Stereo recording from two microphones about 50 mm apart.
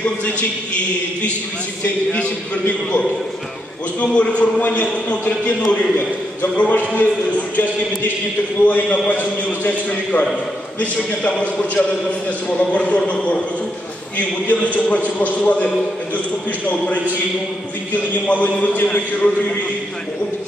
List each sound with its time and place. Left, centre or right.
0.0 s a man's voice: left
4.0 s a man's voice: left
8.6 s a man's voice: left
16.7 s a man's voice: centre
17.9 s a man's voice: left
18.9 s a man's voice: left